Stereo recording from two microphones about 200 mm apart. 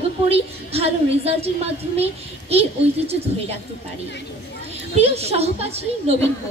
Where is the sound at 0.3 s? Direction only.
30° right (ahead or behind).